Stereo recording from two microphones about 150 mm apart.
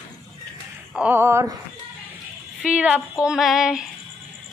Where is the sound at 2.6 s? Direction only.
5° right (ahead or behind).